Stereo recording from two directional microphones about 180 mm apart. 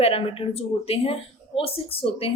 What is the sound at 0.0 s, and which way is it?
A woman's voice, 35° left (ahead or behind).